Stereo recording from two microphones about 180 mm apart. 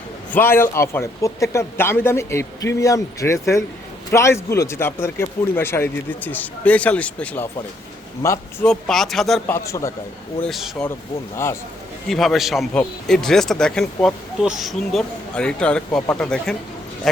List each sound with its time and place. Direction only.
0.3 s a man's voice: 10° left (ahead or behind)
8.6 s a man's voice: 5° left (ahead or behind)
9.6 s a man's voice: 15° left (ahead or behind)
10.4 s a man's voice: centre (ahead or behind)
12.0 s a man's voice: centre (ahead or behind)